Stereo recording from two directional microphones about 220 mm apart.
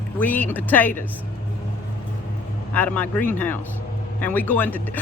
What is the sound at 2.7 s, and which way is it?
Speech, 5° left (ahead or behind).